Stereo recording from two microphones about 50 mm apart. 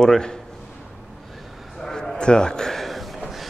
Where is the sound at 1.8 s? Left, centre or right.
Centre.